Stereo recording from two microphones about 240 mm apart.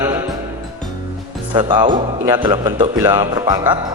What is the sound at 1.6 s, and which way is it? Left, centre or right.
A man's voice, centre.